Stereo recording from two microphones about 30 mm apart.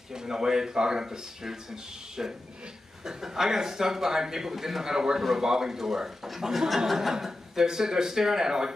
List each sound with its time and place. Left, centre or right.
0.1 s a man's voice: centre